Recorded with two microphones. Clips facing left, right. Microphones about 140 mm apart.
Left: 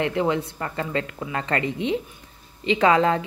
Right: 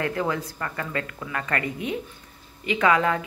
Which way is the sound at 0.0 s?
20° left (ahead or behind).